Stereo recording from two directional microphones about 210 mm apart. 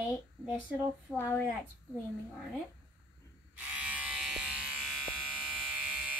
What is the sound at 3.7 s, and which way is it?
Electric shaver, 5° right (ahead or behind).